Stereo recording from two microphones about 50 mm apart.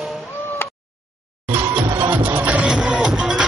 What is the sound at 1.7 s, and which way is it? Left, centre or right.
Music, right.